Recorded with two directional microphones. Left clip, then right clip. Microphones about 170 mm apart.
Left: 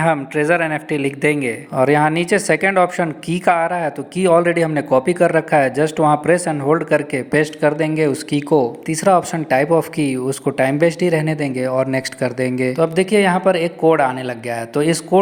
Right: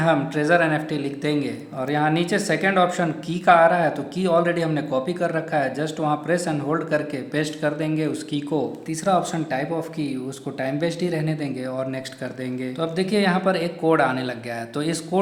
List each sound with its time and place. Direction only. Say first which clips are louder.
0.0 s a man's voice: left 4 dB; 40° left (ahead or behind)